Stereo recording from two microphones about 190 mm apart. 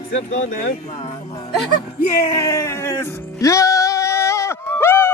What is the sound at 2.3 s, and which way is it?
Music, 15° left (ahead or behind).